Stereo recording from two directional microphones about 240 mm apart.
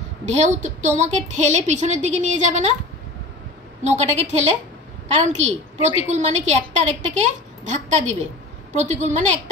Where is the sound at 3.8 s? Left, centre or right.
Right.